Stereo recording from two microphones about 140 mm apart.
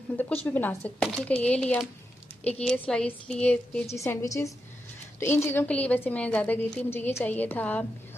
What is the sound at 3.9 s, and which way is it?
A woman's voice, 20° left (ahead or behind).